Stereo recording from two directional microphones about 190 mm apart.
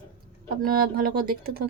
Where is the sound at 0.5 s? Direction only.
50° right (ahead or behind).